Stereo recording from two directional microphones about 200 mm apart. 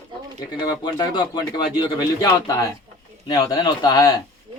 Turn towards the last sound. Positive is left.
turn(degrees=20)  # may be behind; listen again after turning